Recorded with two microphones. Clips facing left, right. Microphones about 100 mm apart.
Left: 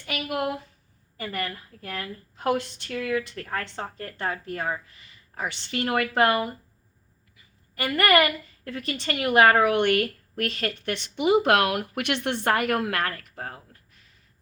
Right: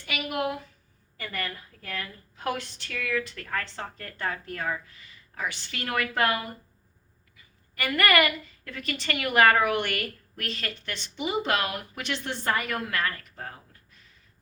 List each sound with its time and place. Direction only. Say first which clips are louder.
0.0 s a woman's voice: left 1 dB; 40° left (ahead or behind)
7.8 s a woman's voice: left 3 dB; 30° left (ahead or behind)
10.3 s speech: left 8 dB; 50° left (ahead or behind)